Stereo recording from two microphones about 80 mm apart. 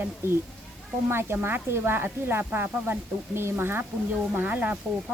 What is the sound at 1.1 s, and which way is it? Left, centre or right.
Speech, right.